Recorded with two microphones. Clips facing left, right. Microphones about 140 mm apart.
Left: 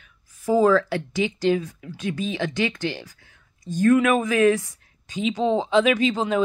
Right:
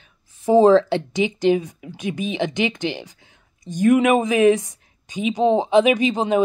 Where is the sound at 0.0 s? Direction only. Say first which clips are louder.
Right 4 dB; 25° right (ahead or behind).